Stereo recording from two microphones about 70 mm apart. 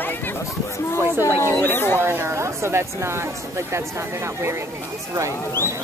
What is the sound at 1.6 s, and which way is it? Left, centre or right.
Speech, left.